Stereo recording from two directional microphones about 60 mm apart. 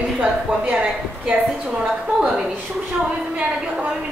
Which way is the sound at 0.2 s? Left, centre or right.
Right.